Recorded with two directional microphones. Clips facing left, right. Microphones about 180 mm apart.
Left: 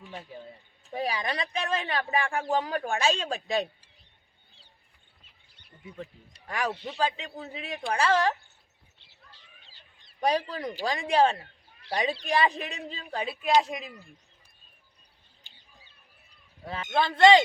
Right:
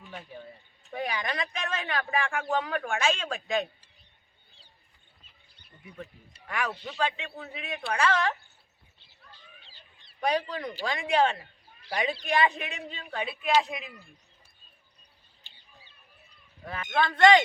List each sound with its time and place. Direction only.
0.1 s speech: 25° left (ahead or behind)
6.5 s speech: 35° left (ahead or behind)
9.6 s goose: 40° left (ahead or behind)
10.8 s speech: 35° left (ahead or behind)
16.6 s speech: 25° left (ahead or behind)